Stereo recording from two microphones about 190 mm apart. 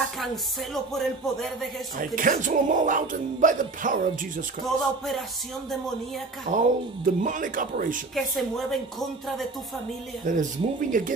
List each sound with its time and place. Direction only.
0.9 s speech: centre (ahead or behind)
2.0 s music: 45° right (ahead or behind)
4.6 s speech: centre (ahead or behind)
6.5 s speech: 40° right (ahead or behind)
7.1 s music: 45° right (ahead or behind)
8.1 s speech: centre (ahead or behind)
10.2 s music: 45° right (ahead or behind)